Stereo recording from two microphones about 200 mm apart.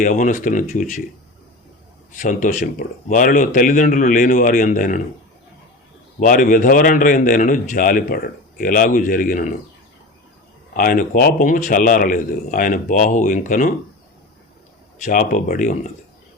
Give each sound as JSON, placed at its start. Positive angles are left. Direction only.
{"t": 0.0, "sound": "speech", "side_deg": 40}
{"t": 2.1, "sound": "speech", "side_deg": 40}
{"t": 6.1, "sound": "a man's voice", "side_deg": 40}
{"t": 10.8, "sound": "speech", "side_deg": 45}
{"t": 15.0, "sound": "speech", "side_deg": 40}